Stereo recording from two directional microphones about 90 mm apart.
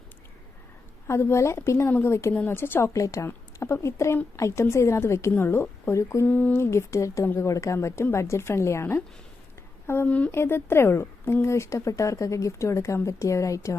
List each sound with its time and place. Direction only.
1.0 s speech: 30° left (ahead or behind)
2.9 s speech: 35° left (ahead or behind)
6.2 s speech: 20° left (ahead or behind); by 13.7 s 35° left (ahead or behind)